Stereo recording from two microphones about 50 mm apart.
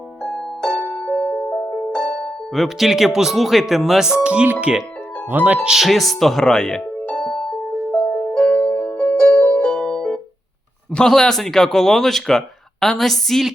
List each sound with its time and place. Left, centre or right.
0.2 s music: centre
1.4 s music: centre
2.6 s speech: centre
4.2 s speech: right
5.3 s speech: right
5.7 s speech: centre
8.2 s music: centre
10.9 s speech: centre